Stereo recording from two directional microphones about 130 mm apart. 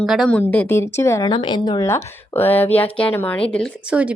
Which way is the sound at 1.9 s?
15° left (ahead or behind).